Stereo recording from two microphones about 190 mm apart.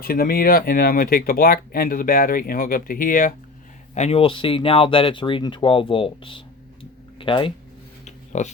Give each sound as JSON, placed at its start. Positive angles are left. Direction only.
{"t": 0.0, "sound": "speech", "side_deg": 50}
{"t": 3.9, "sound": "speech", "side_deg": 35}
{"t": 8.0, "sound": "a sound", "side_deg": 40}